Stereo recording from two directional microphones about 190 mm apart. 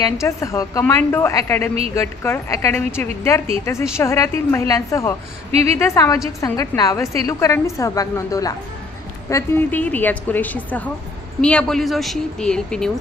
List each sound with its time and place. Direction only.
0.0 s a woman's voice: 15° left (ahead or behind)
5.5 s a woman's voice: 35° right (ahead or behind)
5.7 s a woman's voice: 15° left (ahead or behind)